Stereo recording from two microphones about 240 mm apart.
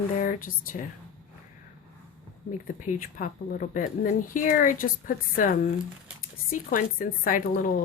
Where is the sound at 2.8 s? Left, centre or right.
Left.